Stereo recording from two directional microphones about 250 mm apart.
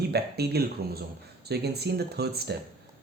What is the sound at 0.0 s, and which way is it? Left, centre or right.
Speech, right.